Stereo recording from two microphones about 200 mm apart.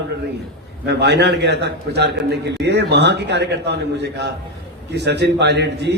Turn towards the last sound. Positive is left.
turn(degrees=-55)  # may be behind; listen again after turning